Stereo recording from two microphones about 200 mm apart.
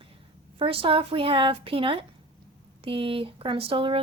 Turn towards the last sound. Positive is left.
turn(degrees=-25)  # may be behind; listen again after turning